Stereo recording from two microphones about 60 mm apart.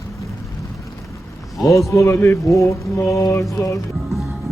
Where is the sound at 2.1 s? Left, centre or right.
Left.